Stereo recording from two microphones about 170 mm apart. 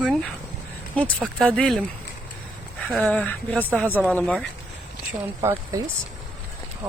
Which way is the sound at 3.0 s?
10° left (ahead or behind).